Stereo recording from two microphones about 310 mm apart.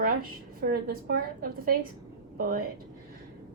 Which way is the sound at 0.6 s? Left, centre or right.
Right.